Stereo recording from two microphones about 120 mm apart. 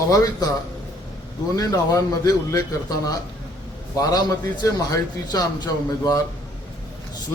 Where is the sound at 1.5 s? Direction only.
30° left (ahead or behind).